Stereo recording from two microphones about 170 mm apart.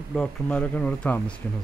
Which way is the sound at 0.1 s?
5° left (ahead or behind).